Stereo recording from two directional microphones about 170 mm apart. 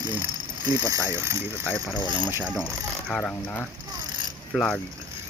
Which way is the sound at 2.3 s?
10° right (ahead or behind).